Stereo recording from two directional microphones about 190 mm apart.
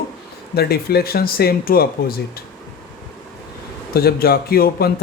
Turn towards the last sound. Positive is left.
turn(degrees=55)  # may be behind; listen again after turning